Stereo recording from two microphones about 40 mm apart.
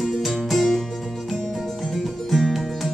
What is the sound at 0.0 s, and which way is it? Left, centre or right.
Music, centre.